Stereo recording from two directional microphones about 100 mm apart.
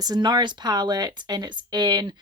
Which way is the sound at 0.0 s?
45° right (ahead or behind).